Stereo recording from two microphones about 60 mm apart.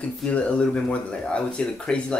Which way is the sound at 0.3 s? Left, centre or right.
Left.